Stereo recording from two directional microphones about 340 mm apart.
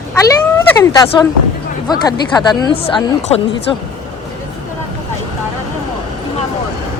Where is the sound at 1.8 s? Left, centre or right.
Centre.